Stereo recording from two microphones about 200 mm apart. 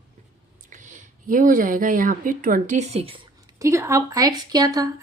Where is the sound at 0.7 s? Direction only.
40° right (ahead or behind).